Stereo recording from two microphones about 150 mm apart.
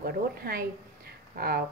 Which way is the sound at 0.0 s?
85° right.